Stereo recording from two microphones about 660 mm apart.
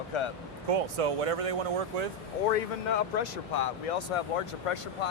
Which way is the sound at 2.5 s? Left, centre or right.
Left.